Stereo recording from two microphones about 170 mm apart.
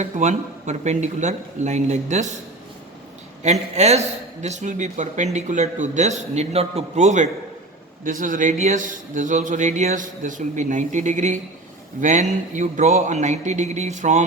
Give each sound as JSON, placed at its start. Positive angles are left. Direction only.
{"t": 0.0, "sound": "a man's voice", "side_deg": -45}
{"t": 3.4, "sound": "a man's voice", "side_deg": -40}